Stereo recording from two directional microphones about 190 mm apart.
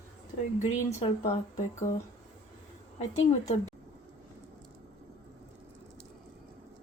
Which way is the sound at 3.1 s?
35° left (ahead or behind).